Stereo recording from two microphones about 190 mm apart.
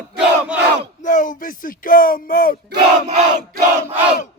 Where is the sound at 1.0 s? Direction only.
45° left (ahead or behind).